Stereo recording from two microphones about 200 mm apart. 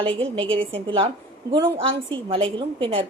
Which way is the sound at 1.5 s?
10° right (ahead or behind).